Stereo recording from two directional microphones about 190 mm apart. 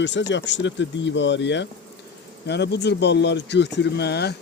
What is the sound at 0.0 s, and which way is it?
Speech, 70° left (ahead or behind).